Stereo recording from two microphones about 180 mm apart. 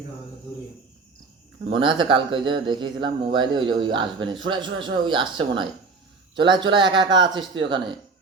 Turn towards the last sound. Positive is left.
turn(degrees=-25)  # may be behind; listen again after turning